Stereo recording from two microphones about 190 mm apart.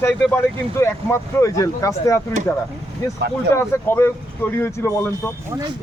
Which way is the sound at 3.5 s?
15° left (ahead or behind).